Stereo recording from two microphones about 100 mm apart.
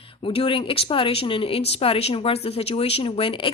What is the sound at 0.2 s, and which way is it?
Speech, 65° left (ahead or behind).